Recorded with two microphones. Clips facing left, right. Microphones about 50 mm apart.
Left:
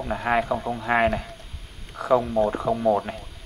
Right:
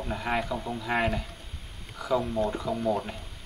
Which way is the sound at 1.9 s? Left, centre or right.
Left.